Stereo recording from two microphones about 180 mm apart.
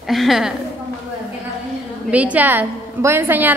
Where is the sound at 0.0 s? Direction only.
Centre (ahead or behind).